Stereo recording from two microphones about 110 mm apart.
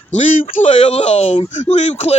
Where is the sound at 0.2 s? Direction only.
90° left.